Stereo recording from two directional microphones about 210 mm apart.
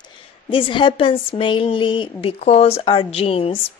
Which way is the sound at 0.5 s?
25° left (ahead or behind).